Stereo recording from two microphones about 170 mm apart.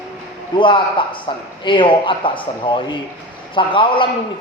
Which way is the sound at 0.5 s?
30° left (ahead or behind).